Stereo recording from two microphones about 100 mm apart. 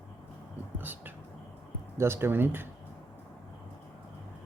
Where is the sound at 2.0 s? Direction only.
25° right (ahead or behind).